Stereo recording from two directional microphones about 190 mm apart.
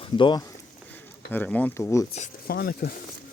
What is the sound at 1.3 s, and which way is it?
Speech, 10° left (ahead or behind).